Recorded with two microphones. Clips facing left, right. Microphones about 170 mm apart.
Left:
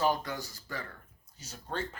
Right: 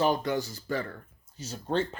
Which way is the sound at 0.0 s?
25° right (ahead or behind).